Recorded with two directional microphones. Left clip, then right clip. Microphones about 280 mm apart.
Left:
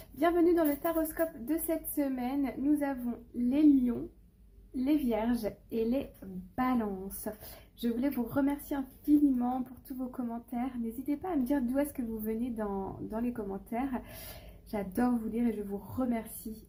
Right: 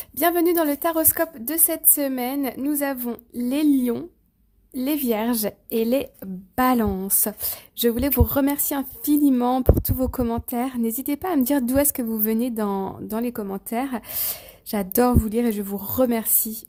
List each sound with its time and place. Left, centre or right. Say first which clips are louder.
0.2 s a woman's voice: right 7 dB; right